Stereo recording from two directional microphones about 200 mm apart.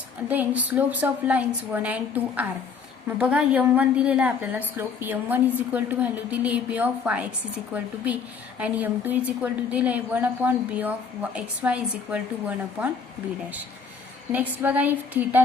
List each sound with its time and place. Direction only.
0.3 s a woman's voice: 10° right (ahead or behind)
14.3 s a woman's voice: 10° right (ahead or behind)